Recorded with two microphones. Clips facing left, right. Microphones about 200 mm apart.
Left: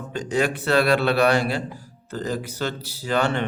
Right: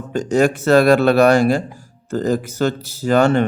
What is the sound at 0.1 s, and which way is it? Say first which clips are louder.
A man's voice: right 8 dB; 45° right (ahead or behind).